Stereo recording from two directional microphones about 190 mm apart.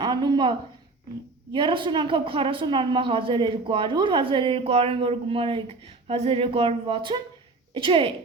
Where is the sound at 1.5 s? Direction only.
25° right (ahead or behind).